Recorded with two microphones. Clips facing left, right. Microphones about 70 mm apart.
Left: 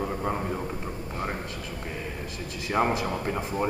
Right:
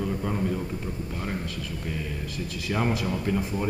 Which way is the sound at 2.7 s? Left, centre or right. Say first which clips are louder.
Left 2 dB; left.